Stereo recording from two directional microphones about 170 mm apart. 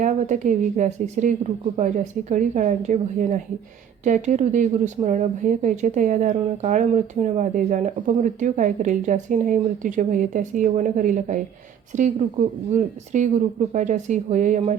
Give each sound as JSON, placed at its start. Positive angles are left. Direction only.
{"t": 0.0, "sound": "a woman's voice", "side_deg": -45}